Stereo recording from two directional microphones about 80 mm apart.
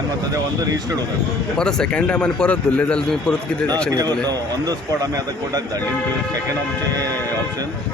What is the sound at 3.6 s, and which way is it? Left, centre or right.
Speech, right.